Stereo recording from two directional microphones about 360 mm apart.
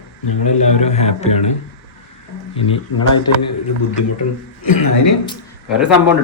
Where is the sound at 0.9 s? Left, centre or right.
Centre.